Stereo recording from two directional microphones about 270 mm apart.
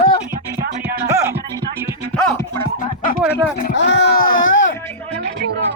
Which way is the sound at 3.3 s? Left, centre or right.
Left.